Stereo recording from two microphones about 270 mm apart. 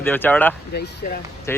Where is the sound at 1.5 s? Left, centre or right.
Centre.